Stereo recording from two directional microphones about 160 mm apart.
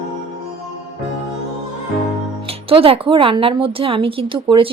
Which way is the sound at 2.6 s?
35° right (ahead or behind).